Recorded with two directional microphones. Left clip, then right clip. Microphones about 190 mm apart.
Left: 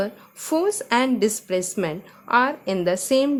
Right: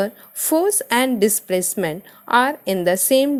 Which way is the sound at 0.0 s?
25° right (ahead or behind).